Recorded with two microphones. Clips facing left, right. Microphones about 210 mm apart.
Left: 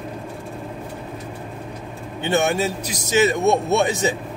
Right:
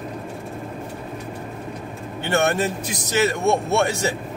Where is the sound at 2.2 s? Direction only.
15° left (ahead or behind).